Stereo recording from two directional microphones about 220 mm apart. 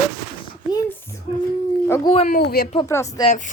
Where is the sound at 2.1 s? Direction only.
25° left (ahead or behind).